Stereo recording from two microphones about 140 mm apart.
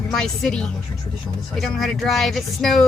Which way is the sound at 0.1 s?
5° left (ahead or behind).